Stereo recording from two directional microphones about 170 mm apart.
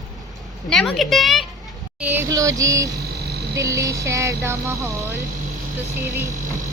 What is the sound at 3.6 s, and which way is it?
Speech, 20° right (ahead or behind).